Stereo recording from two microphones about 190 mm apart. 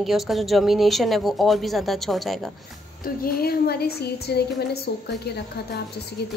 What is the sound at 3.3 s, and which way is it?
A woman's voice, 55° left (ahead or behind).